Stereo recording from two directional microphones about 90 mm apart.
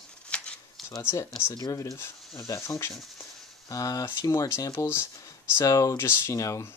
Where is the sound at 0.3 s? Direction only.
10° left (ahead or behind).